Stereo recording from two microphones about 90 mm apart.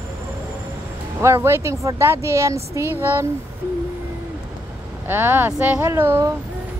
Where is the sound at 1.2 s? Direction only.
30° right (ahead or behind).